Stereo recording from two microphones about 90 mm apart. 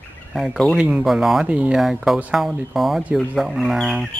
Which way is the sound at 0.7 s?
10° right (ahead or behind).